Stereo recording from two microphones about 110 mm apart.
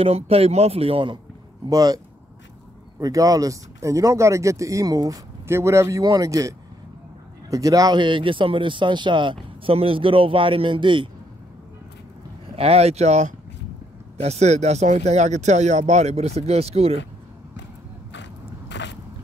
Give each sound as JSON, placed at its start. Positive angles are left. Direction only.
{"t": 0.0, "sound": "speech", "side_deg": -65}
{"t": 1.7, "sound": "speech", "side_deg": -35}
{"t": 3.0, "sound": "speech", "side_deg": -30}
{"t": 12.5, "sound": "speech", "side_deg": -70}
{"t": 14.1, "sound": "speech", "side_deg": -80}